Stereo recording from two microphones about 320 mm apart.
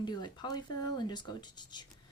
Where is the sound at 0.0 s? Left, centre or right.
Centre.